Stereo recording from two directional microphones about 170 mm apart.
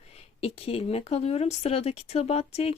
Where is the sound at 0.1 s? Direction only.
35° left (ahead or behind).